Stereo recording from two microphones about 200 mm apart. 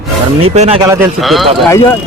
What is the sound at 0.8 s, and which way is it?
Music, 15° right (ahead or behind).